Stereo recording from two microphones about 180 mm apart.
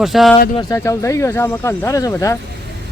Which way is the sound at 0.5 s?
25° left (ahead or behind).